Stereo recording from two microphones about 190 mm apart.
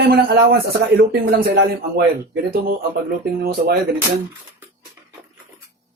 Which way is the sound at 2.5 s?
55° right (ahead or behind).